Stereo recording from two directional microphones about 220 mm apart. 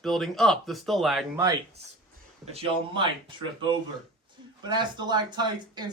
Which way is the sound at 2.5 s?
25° right (ahead or behind).